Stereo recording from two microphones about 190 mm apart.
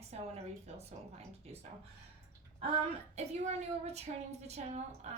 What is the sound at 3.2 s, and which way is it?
A woman's voice, 35° right (ahead or behind).